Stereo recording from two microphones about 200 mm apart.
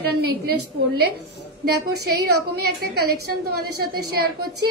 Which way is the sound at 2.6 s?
55° right (ahead or behind).